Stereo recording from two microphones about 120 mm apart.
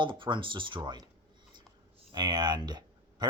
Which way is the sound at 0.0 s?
40° right (ahead or behind).